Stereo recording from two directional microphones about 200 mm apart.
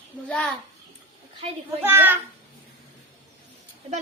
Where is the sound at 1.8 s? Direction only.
10° right (ahead or behind).